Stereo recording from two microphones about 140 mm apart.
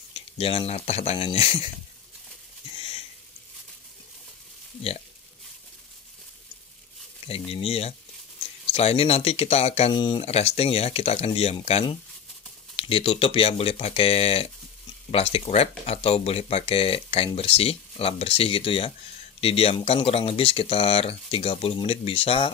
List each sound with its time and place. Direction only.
0.1 s speech: 45° left (ahead or behind)
7.2 s speech: 45° left (ahead or behind)
9.9 s speech: 35° left (ahead or behind)
10.2 s speech: 45° left (ahead or behind)
12.8 s speech: 45° left (ahead or behind)